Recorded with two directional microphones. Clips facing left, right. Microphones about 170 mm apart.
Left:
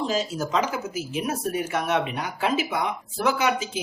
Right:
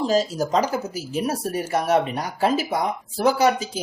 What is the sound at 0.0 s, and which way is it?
Speech, 35° right (ahead or behind).